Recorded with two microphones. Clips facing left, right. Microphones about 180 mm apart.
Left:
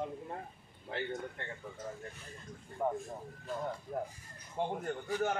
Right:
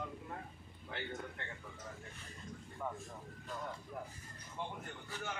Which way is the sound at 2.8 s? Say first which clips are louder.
Left 9 dB; 45° left (ahead or behind).